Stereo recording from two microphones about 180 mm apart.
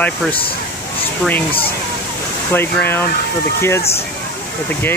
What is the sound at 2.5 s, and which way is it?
Speech, 10° left (ahead or behind).